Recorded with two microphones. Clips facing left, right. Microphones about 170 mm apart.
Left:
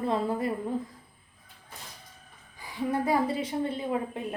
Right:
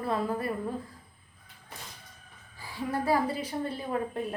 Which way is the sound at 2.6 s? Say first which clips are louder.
Left 3 dB; 20° left (ahead or behind).